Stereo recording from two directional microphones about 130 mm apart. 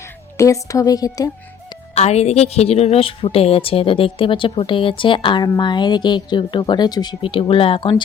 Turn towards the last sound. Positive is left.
turn(degrees=45)  # may be behind; listen again after turning